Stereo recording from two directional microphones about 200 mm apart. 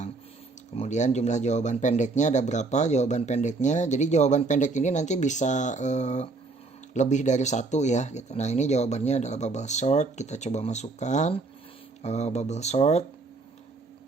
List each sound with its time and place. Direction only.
0.8 s speech: 35° left (ahead or behind)